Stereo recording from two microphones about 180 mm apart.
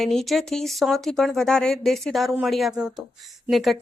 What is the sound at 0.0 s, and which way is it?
A woman's voice, centre (ahead or behind).